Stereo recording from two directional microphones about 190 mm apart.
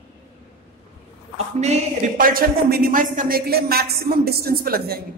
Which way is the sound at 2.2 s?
50° right (ahead or behind).